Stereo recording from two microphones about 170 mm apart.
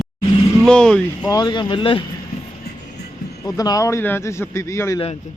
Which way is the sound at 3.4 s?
20° left (ahead or behind).